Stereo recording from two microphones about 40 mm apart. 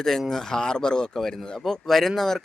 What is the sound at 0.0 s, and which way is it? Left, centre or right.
Speech, centre.